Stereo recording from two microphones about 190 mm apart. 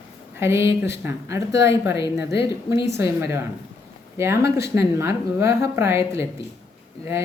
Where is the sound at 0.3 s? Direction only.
15° right (ahead or behind).